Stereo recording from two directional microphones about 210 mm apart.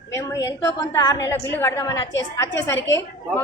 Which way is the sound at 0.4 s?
15° left (ahead or behind).